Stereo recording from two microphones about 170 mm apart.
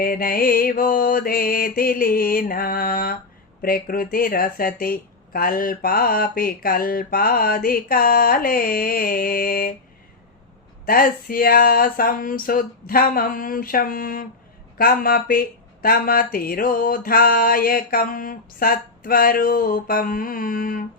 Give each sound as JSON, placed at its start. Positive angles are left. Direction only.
{"t": 0.0, "sound": "speech", "side_deg": 55}
{"t": 10.8, "sound": "speech", "side_deg": 60}